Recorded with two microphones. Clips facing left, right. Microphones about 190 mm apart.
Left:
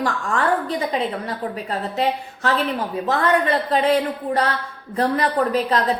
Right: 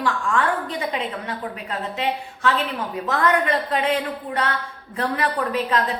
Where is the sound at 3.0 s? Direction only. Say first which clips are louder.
Left 1 dB; 30° left (ahead or behind).